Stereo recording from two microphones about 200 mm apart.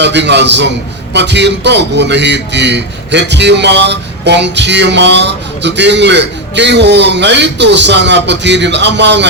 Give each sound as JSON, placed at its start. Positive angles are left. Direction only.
{"t": 0.0, "sound": "a man's voice", "side_deg": -60}